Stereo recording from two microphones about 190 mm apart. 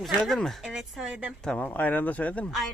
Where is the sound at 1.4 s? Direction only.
5° left (ahead or behind).